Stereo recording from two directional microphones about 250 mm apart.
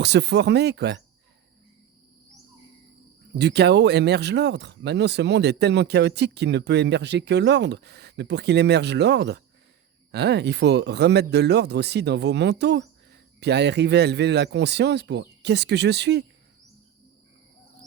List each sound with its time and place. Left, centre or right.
0.0 s a man's voice: right
3.3 s a man's voice: right